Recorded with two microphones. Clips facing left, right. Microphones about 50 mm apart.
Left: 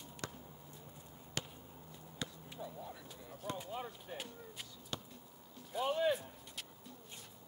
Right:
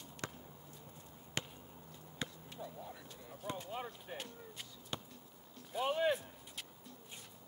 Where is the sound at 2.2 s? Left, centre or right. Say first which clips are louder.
Right 1 dB; right.